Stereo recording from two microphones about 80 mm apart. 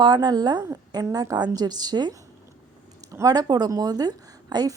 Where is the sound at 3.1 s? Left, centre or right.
Right.